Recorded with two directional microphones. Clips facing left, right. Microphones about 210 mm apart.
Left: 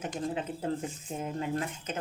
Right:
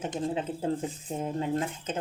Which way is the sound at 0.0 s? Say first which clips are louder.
Right 3 dB; 30° right (ahead or behind).